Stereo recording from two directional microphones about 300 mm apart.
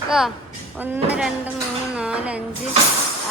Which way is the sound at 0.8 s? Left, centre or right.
Centre.